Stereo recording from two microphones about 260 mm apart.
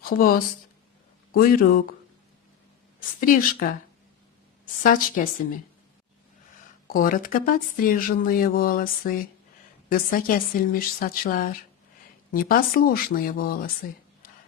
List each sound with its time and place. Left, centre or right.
0.0 s speech: left
3.2 s speech: left
4.8 s speech: left
6.8 s speech: left